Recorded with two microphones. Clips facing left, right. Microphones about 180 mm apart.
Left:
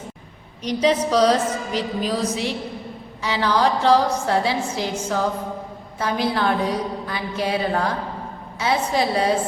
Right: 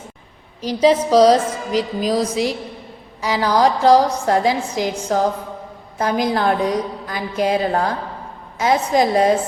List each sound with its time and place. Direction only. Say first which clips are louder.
0.8 s music: right 5 dB; 30° right (ahead or behind)
6.0 s a woman's voice: right 3 dB; 40° right (ahead or behind)